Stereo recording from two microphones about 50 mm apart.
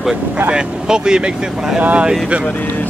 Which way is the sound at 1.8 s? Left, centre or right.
Right.